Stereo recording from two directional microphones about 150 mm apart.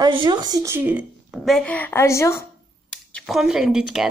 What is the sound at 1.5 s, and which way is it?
Speech, 5° left (ahead or behind).